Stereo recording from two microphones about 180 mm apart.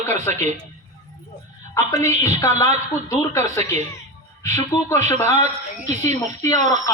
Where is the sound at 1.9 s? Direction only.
15° left (ahead or behind).